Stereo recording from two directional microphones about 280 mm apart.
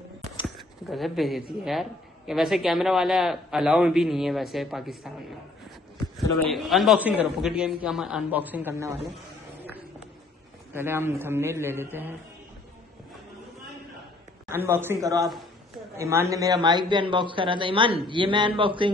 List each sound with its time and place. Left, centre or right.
0.6 s a woman's voice: centre
6.5 s a woman's voice: centre
10.7 s a man's voice: centre
14.5 s a man's voice: centre